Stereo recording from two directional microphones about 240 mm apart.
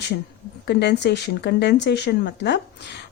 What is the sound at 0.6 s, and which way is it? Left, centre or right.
Speech, left.